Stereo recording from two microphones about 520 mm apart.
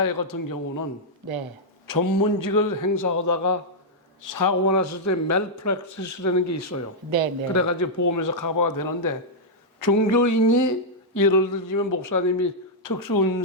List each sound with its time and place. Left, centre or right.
0.0 s a man's voice: left
1.9 s a man's voice: left